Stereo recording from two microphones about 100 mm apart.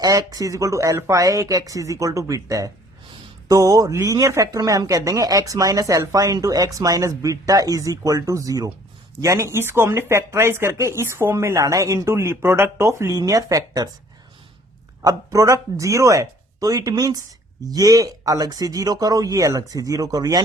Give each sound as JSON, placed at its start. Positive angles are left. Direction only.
{"t": 0.0, "sound": "speech", "side_deg": -40}
{"t": 15.0, "sound": "speech", "side_deg": -35}